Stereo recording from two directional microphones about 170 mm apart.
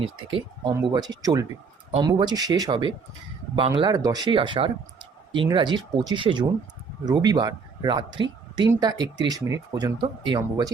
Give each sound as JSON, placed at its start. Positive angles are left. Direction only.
{"t": 0.0, "sound": "speech", "side_deg": -30}